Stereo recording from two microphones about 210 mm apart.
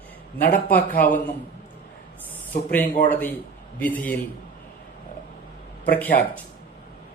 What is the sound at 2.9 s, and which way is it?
Speech, 40° left (ahead or behind).